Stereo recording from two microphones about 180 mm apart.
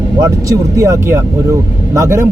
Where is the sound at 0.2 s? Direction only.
20° right (ahead or behind).